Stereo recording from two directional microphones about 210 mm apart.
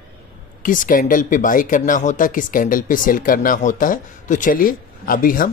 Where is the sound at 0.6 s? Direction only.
40° left (ahead or behind).